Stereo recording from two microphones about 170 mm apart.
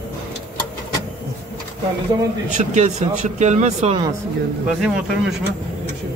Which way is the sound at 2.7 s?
45° right (ahead or behind).